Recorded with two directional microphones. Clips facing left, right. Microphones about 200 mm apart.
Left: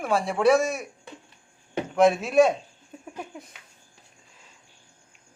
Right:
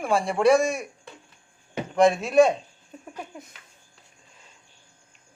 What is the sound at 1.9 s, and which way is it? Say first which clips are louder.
Speech: right 1 dB; 5° left (ahead or behind).